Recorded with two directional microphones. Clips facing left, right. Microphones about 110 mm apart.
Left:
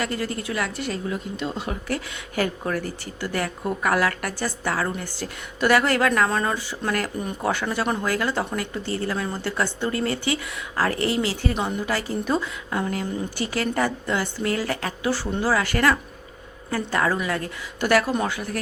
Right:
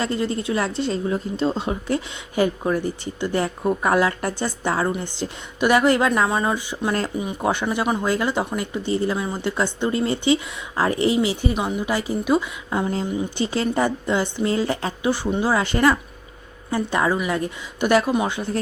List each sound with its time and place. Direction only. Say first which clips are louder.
0.0 s a woman's voice: right 4 dB; 25° right (ahead or behind)